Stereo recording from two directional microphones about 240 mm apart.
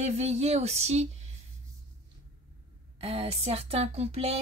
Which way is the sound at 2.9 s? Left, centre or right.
Right.